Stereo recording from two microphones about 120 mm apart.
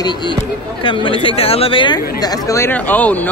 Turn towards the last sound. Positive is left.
turn(degrees=15)  # may be behind; listen again after turning